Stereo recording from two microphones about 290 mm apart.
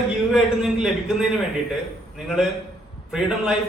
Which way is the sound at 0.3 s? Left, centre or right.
Centre.